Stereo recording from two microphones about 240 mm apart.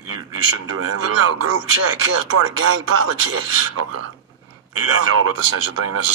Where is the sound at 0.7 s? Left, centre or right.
Right.